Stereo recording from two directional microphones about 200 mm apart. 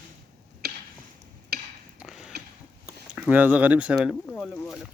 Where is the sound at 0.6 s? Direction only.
55° right (ahead or behind).